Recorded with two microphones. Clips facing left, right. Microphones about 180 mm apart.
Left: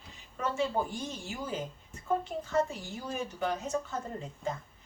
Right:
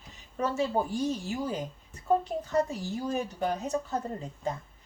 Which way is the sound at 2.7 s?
35° right (ahead or behind).